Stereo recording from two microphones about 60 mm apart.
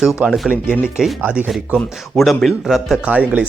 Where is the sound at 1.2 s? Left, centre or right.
Right.